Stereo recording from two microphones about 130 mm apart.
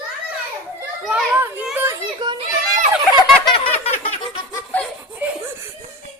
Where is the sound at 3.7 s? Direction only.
55° left (ahead or behind).